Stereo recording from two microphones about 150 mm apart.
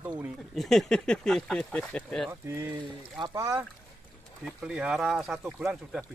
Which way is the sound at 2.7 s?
30° right (ahead or behind).